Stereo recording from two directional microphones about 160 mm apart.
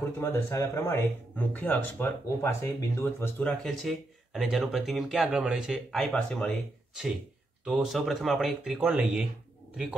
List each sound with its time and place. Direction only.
0.2 s speech: 15° left (ahead or behind); by 6.5 s centre (ahead or behind)
7.6 s speech: 5° right (ahead or behind)